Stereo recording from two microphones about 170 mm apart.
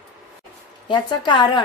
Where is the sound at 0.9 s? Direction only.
30° left (ahead or behind).